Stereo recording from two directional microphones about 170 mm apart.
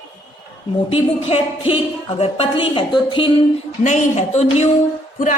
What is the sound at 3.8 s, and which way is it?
Speech, 45° left (ahead or behind).